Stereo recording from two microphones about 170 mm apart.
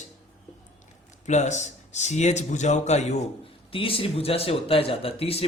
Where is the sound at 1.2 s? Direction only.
45° left (ahead or behind).